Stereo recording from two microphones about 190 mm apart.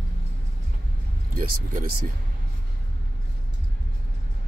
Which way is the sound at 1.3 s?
50° right (ahead or behind).